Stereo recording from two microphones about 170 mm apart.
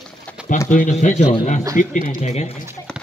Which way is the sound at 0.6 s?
50° left (ahead or behind).